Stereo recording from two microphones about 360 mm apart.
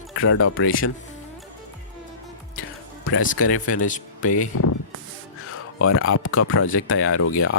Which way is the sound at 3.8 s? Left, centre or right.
Left.